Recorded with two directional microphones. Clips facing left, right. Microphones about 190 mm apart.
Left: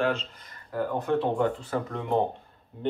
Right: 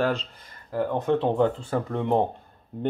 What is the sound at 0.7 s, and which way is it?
Speech, 20° right (ahead or behind).